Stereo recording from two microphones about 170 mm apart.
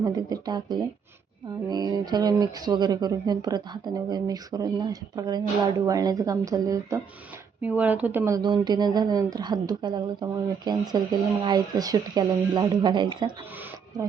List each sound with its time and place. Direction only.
0.0 s speech: 25° right (ahead or behind)